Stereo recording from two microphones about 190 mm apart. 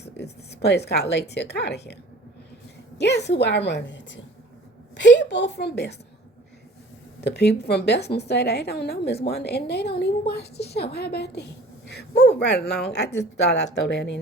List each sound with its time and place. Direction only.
0.0 s a woman's voice: 60° left (ahead or behind)
3.0 s a woman's voice: 65° left (ahead or behind)
7.2 s a woman's voice: 60° left (ahead or behind)